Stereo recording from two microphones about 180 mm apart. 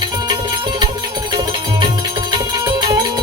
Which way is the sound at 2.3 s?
25° right (ahead or behind).